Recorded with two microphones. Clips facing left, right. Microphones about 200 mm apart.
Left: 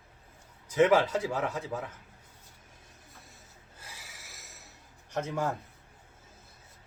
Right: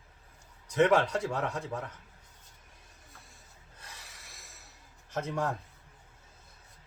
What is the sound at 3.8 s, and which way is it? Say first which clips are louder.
Gasp: left 1 dB; 5° left (ahead or behind).